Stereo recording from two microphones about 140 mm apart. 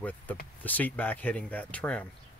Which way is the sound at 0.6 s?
10° left (ahead or behind).